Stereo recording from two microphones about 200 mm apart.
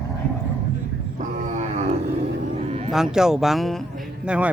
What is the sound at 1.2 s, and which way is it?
Wild animals, 40° right (ahead or behind).